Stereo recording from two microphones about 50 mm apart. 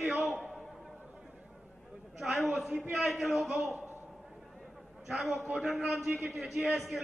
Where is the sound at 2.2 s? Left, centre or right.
Centre.